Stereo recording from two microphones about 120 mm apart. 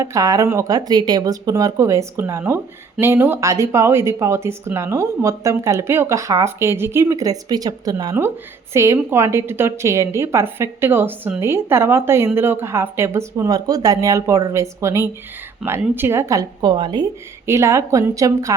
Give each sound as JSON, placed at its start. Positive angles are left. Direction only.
{"t": 0.0, "sound": "a woman's voice", "side_deg": -25}
{"t": 15.6, "sound": "speech", "side_deg": 0}
{"t": 16.0, "sound": "a woman's voice", "side_deg": -20}
{"t": 17.4, "sound": "a woman's voice", "side_deg": -25}